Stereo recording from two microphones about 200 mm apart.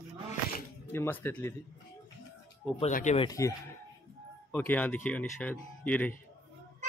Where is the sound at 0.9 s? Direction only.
10° left (ahead or behind).